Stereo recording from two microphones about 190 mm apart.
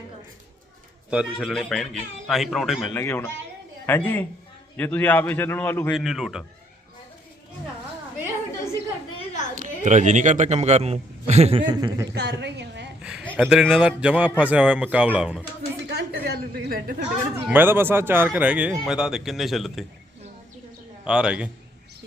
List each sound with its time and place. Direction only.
1.1 s a man's voice: 5° right (ahead or behind)
2.9 s a man's voice: 10° left (ahead or behind)
6.0 s a man's voice: centre (ahead or behind)
9.6 s a man's voice: 40° right (ahead or behind)
11.7 s speech: 20° right (ahead or behind)
12.1 s a woman's voice: 60° right (ahead or behind)
13.0 s a sound: 5° right (ahead or behind)
13.2 s a sound: 5° left (ahead or behind)
13.5 s a man's voice: 5° right (ahead or behind)
15.9 s a sound: 55° right (ahead or behind)
17.4 s a man's voice: 10° right (ahead or behind)
21.0 s a man's voice: 5° right (ahead or behind)